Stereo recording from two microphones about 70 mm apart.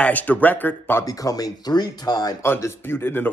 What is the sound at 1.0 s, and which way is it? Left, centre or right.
Speech, left.